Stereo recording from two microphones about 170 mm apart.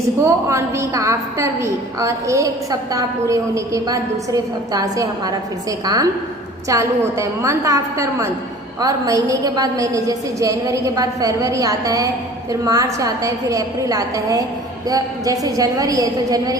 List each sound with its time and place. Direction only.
0.3 s a woman's voice: 15° right (ahead or behind)